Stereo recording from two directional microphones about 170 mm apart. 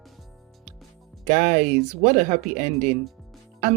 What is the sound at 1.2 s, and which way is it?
Speech, 50° right (ahead or behind).